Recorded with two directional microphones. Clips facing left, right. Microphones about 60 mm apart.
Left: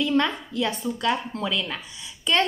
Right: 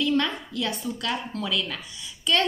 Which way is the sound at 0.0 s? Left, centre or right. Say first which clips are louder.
Left 2 dB; left.